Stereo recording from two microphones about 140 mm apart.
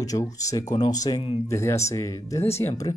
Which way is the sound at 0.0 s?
25° left (ahead or behind).